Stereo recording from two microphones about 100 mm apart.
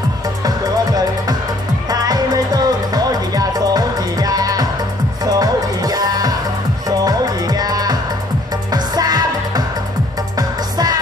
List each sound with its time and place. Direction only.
1.9 s music: 40° right (ahead or behind)
10.3 s music: 40° right (ahead or behind)